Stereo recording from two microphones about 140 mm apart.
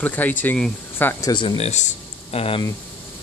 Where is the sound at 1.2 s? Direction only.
30° left (ahead or behind).